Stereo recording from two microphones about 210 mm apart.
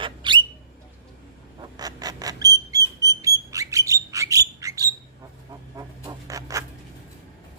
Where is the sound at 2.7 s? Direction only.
15° right (ahead or behind).